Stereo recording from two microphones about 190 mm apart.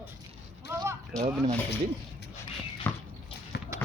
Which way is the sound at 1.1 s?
5° left (ahead or behind).